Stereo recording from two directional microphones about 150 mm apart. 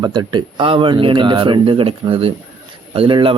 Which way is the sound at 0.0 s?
30° right (ahead or behind).